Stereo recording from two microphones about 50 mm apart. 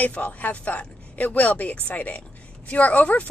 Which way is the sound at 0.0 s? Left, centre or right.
Left.